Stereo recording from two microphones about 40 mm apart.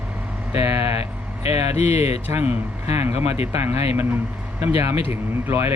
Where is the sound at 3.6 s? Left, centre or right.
Right.